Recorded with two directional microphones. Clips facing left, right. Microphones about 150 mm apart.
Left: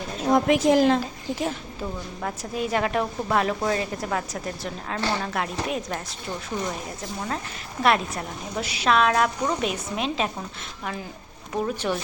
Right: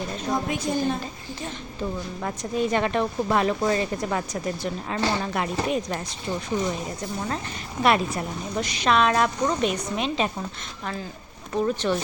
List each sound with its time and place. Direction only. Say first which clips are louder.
0.3 s a woman's voice: left 9 dB; 90° left
2.2 s a woman's voice: right 3 dB; 5° left (ahead or behind)
11.5 s speech: right 2 dB; 10° left (ahead or behind)